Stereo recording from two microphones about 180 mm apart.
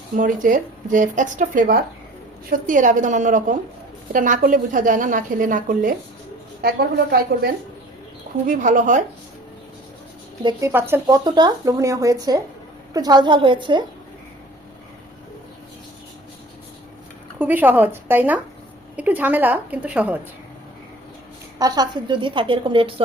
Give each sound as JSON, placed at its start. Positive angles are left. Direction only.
{"t": 0.2, "sound": "a woman's voice", "side_deg": -50}
{"t": 6.6, "sound": "a woman's voice", "side_deg": -60}
{"t": 8.4, "sound": "a woman's voice", "side_deg": -45}
{"t": 10.4, "sound": "a woman's voice", "side_deg": -15}
{"t": 11.2, "sound": "a woman's voice", "side_deg": -25}
{"t": 17.4, "sound": "a woman's voice", "side_deg": -10}
{"t": 21.6, "sound": "a woman's voice", "side_deg": -25}